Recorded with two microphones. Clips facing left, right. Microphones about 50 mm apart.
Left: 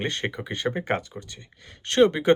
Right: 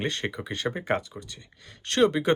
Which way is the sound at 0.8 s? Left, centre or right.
Left.